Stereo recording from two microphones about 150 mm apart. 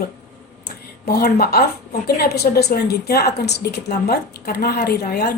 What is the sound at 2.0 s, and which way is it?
Speech, 90° left.